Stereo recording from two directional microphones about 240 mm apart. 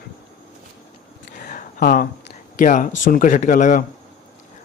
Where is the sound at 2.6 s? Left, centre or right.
Left.